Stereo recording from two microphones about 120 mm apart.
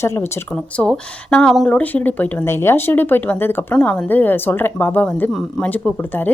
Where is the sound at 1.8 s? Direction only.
15° left (ahead or behind).